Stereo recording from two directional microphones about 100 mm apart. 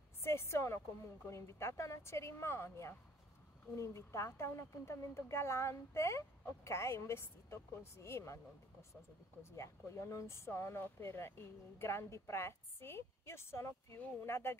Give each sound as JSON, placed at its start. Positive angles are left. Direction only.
{"t": 0.2, "sound": "a woman's voice", "side_deg": 25}
{"t": 9.4, "sound": "a woman's voice", "side_deg": 25}